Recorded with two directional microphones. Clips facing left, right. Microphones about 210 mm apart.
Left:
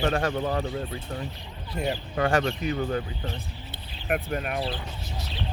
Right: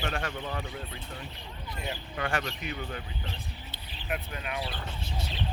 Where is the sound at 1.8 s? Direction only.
40° left (ahead or behind).